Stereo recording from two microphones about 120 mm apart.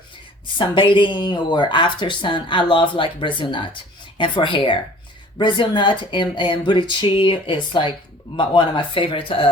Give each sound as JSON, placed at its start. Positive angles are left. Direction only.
{"t": 0.4, "sound": "speech", "side_deg": 45}